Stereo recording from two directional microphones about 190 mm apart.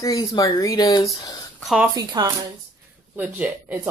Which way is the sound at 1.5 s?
Centre (ahead or behind).